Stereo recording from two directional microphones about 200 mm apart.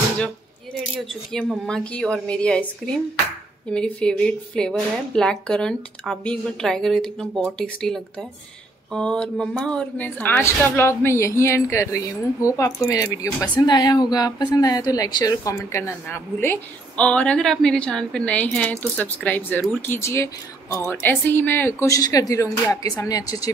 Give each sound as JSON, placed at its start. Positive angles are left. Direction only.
{"t": 1.0, "sound": "a woman's voice", "side_deg": 0}